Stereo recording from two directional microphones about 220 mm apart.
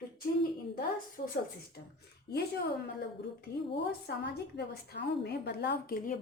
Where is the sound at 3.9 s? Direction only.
45° left (ahead or behind).